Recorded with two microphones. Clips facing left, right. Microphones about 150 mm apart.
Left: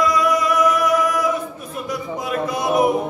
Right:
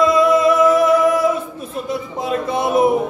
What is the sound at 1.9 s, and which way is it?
Speech, 25° right (ahead or behind).